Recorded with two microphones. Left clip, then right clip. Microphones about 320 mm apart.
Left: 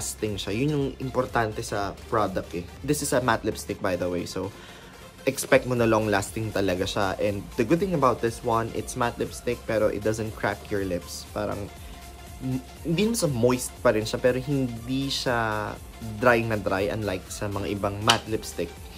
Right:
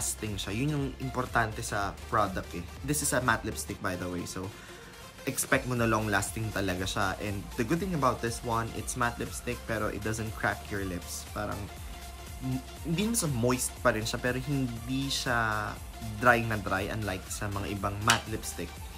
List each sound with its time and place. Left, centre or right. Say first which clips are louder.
0.0 s speech: left 6 dB; centre
12.9 s speech: left 7 dB; centre